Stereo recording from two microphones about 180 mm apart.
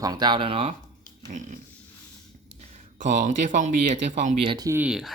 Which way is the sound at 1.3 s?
45° right (ahead or behind).